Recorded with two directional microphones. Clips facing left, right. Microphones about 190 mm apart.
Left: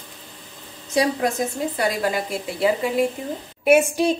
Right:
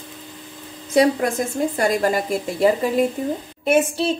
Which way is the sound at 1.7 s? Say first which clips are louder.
Right 3 dB; 45° right (ahead or behind).